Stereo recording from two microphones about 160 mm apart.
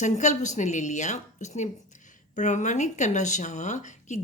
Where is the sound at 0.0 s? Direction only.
50° left (ahead or behind).